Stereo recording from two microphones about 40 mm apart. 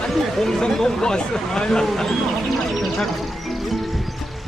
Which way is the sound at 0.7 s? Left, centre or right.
Centre.